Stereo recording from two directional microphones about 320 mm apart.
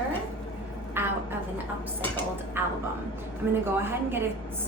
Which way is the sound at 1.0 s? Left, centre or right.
Centre.